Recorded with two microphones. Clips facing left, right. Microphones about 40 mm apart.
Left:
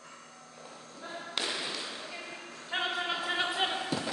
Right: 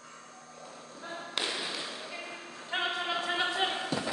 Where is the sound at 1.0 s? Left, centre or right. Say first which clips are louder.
Right 1 dB; centre.